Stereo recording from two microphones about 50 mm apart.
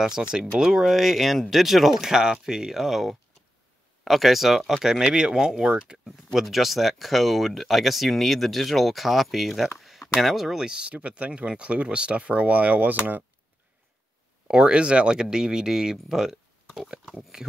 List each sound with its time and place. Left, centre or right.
0.0 s speech: centre
6.0 s speech: centre; by 12.9 s right
14.5 s speech: centre